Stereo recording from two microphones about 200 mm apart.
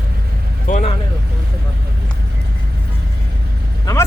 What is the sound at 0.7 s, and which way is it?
Vehicle, 35° left (ahead or behind).